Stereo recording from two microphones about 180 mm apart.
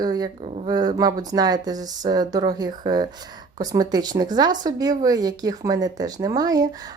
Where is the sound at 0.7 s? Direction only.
20° right (ahead or behind).